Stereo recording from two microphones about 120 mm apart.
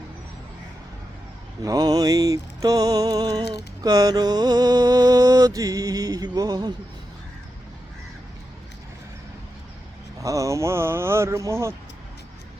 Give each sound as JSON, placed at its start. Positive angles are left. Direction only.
{"t": 1.6, "sound": "music", "side_deg": -30}
{"t": 10.2, "sound": "speech", "side_deg": -25}